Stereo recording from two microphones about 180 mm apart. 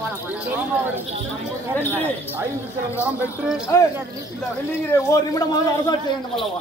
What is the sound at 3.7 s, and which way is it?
Speech, 15° left (ahead or behind).